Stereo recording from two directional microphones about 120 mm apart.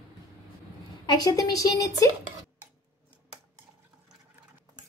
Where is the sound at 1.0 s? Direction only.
35° left (ahead or behind).